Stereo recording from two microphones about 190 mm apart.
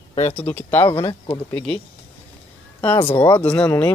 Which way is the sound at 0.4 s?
10° left (ahead or behind).